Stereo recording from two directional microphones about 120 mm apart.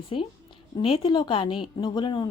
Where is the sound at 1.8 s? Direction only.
40° left (ahead or behind).